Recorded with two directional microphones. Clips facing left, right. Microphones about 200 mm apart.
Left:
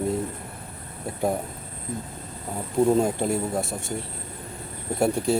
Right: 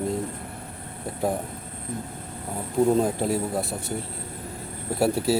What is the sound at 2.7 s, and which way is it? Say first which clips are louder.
Speech: even; centre (ahead or behind).